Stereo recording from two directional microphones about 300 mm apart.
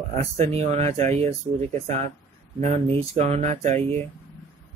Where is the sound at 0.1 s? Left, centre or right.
Right.